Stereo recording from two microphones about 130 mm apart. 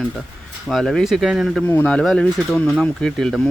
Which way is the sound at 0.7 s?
Centre (ahead or behind).